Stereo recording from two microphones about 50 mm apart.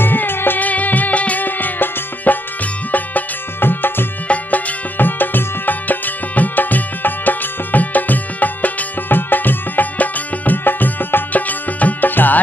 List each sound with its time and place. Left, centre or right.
0.0 s music: left
0.6 s music: left